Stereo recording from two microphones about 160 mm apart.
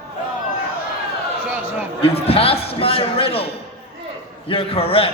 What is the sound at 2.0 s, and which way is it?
Speech, 35° left (ahead or behind).